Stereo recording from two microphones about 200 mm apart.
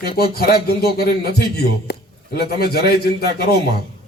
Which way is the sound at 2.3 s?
50° left (ahead or behind).